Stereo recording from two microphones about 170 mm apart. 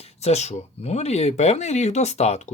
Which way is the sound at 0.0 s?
40° left (ahead or behind).